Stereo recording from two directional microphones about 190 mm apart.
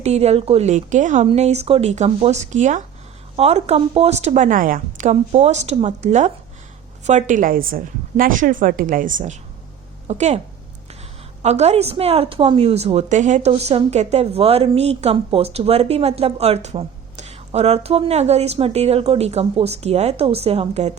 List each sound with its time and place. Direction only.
0.0 s a woman's voice: 35° right (ahead or behind)
11.4 s a woman's voice: 35° right (ahead or behind)